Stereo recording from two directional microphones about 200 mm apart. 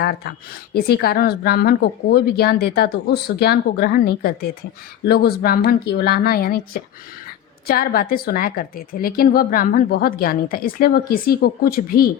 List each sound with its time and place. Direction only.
0.0 s a woman's voice: 50° left (ahead or behind)